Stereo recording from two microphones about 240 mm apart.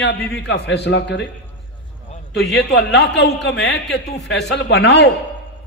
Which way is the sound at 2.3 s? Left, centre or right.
Left.